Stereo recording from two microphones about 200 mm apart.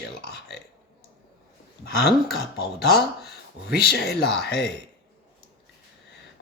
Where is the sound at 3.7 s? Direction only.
55° left (ahead or behind).